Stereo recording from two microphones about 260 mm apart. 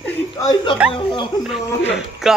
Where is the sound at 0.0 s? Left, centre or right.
Centre.